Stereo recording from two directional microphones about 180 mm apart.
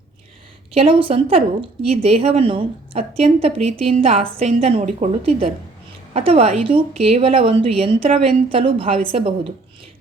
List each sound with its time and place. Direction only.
0.7 s a woman's voice: 30° right (ahead or behind)